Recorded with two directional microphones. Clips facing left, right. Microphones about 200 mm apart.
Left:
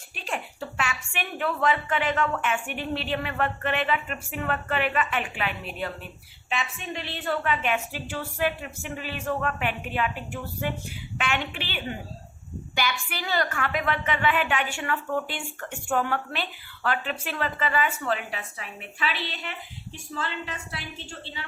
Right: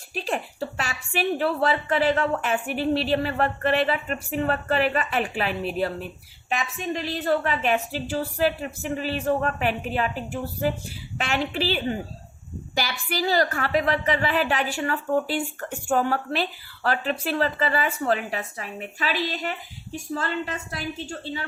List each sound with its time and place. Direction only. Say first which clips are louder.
0.1 s a woman's voice: right 5 dB; 40° right (ahead or behind)
13.1 s a woman's voice: right 6 dB; 35° right (ahead or behind)